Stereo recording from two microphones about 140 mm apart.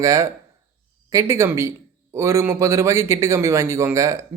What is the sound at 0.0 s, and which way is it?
Speech, 25° right (ahead or behind).